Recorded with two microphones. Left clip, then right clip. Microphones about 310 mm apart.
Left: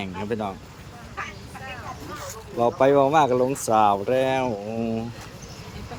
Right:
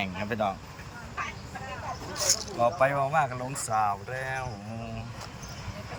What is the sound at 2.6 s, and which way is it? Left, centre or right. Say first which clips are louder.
Speech: left 8 dB; centre.